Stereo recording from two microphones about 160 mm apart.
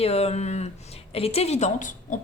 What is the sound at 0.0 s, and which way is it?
A woman's voice, 40° left (ahead or behind).